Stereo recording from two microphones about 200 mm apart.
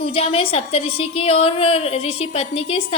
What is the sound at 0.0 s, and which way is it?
A woman's voice, 30° left (ahead or behind).